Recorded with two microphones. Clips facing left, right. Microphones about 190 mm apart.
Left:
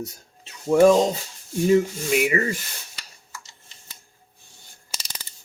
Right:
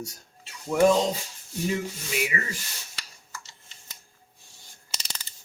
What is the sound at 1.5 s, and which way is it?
Sanding, 50° left (ahead or behind).